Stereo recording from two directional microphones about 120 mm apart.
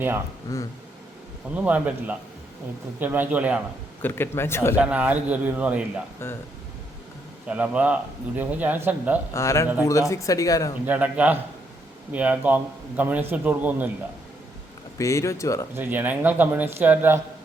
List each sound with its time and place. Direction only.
0.5 s speech: 25° left (ahead or behind)
1.5 s speech: 10° right (ahead or behind)
4.0 s speech: 20° left (ahead or behind)
4.8 s speech: 10° right (ahead or behind)
6.2 s speech: 20° left (ahead or behind)
7.4 s speech: 10° right (ahead or behind)
9.3 s speech: 25° left (ahead or behind)
10.8 s speech: 10° right (ahead or behind)
14.9 s speech: 25° left (ahead or behind)
15.7 s speech: 15° right (ahead or behind)